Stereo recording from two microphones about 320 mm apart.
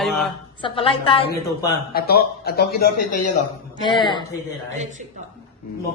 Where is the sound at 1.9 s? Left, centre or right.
Left.